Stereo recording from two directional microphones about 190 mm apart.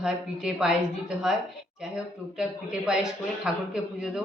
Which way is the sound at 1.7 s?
5° right (ahead or behind).